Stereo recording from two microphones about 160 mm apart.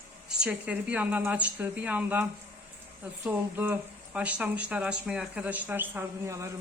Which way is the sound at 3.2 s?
10° right (ahead or behind).